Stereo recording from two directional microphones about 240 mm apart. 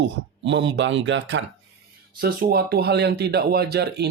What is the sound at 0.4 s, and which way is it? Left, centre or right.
Speech, right.